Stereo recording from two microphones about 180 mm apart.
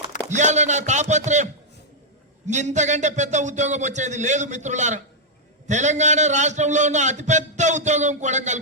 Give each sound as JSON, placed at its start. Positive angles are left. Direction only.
{"t": 0.3, "sound": "a man's voice", "side_deg": -40}
{"t": 2.5, "sound": "a man's voice", "side_deg": -40}